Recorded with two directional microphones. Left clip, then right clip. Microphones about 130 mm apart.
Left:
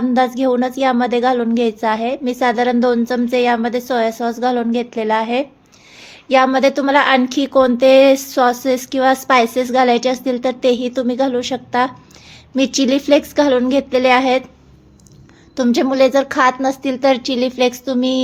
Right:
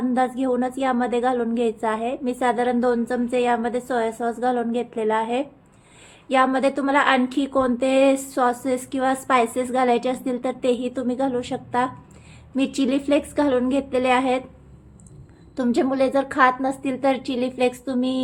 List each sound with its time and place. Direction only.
0.1 s speech: 35° left (ahead or behind)
15.5 s speech: 30° left (ahead or behind)